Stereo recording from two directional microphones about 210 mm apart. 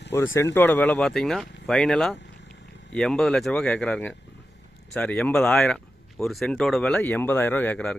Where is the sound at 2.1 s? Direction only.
55° left (ahead or behind).